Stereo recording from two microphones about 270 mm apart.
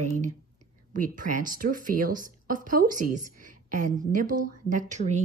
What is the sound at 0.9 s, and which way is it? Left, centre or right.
Speech, right.